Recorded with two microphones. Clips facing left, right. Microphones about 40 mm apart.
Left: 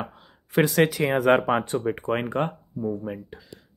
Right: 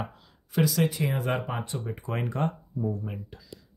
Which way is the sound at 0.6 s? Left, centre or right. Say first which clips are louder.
Left 6 dB; left.